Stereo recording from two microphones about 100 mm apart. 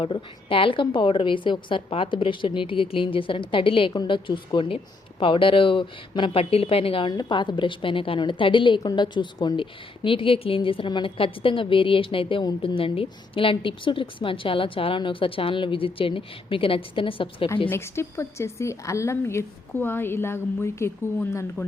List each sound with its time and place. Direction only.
0.0 s a woman's voice: 65° left (ahead or behind)
7.1 s a woman's voice: 45° left (ahead or behind); by 17.5 s 60° left (ahead or behind)
17.7 s a woman's voice: 25° left (ahead or behind)